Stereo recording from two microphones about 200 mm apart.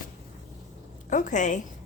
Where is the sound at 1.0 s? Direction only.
40° left (ahead or behind).